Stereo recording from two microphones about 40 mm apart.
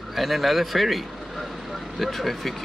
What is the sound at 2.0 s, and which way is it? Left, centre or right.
Speech, centre.